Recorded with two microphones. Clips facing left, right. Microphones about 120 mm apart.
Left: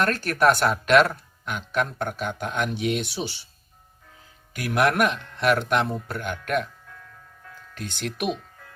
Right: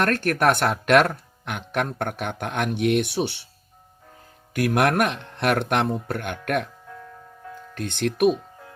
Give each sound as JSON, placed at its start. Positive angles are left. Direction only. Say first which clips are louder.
{"t": 0.0, "sound": "speech", "louder": "even", "side_deg": -55}
{"t": 4.5, "sound": "speech", "louder": "right 2 dB", "side_deg": -55}
{"t": 7.8, "sound": "speech", "louder": "right 8 dB", "side_deg": -55}